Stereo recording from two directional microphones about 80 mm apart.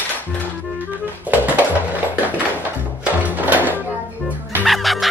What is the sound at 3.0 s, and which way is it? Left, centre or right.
Music, centre.